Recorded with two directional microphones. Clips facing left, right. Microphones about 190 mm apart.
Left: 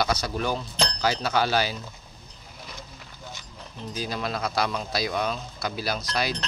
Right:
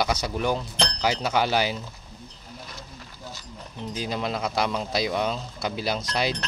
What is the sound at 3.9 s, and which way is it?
A man's voice, 20° right (ahead or behind).